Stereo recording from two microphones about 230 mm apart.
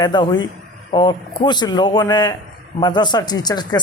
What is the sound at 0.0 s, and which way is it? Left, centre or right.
A man's voice, centre.